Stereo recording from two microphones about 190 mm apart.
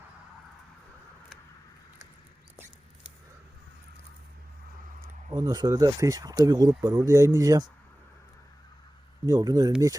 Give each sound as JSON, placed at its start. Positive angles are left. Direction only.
{"t": 5.0, "sound": "speech", "side_deg": -20}
{"t": 9.2, "sound": "speech", "side_deg": -20}